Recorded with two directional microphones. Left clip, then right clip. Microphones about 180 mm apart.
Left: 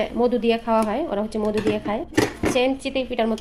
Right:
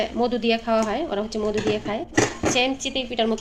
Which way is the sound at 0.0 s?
20° left (ahead or behind).